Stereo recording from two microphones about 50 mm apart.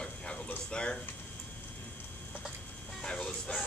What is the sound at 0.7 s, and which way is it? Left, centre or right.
Speech, left.